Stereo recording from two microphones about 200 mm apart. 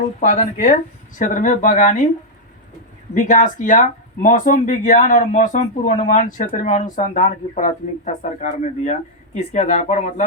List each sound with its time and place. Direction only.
0.2 s speech: 40° left (ahead or behind)
3.2 s speech: 40° left (ahead or behind)